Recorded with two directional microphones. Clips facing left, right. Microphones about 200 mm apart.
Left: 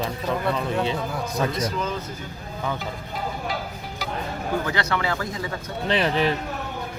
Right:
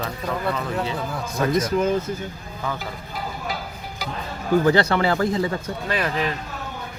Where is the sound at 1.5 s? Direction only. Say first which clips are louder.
Right 6 dB; 50° right (ahead or behind).